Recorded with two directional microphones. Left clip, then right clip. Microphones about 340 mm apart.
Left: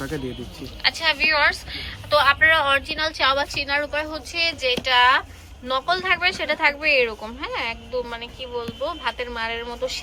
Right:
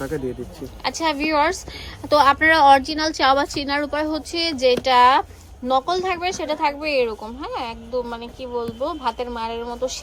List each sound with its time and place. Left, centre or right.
0.8 s speech: centre